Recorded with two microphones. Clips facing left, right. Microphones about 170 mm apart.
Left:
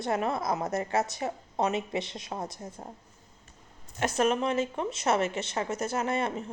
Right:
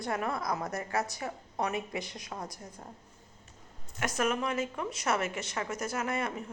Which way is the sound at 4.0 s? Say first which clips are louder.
Left 4 dB; 25° left (ahead or behind).